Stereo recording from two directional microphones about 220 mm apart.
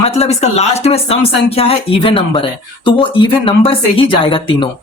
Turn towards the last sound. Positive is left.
turn(degrees=25)  # may be behind; listen again after turning